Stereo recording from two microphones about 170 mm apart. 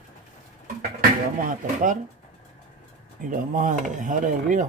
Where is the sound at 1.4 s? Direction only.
50° right (ahead or behind).